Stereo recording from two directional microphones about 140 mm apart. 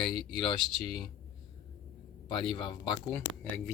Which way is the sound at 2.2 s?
35° left (ahead or behind).